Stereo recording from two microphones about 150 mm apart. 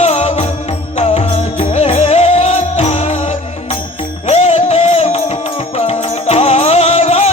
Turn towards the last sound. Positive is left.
turn(degrees=45)  # may be behind; listen again after turning